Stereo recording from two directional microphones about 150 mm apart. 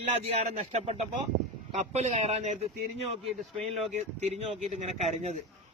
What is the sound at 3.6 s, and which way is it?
Speech, 45° right (ahead or behind).